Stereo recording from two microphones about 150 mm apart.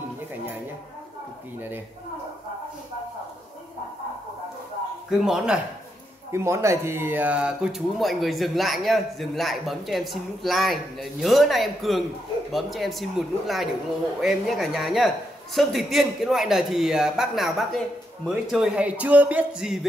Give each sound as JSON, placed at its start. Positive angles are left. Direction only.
{"t": 5.2, "sound": "speech", "side_deg": -5}
{"t": 6.3, "sound": "a man's voice", "side_deg": -20}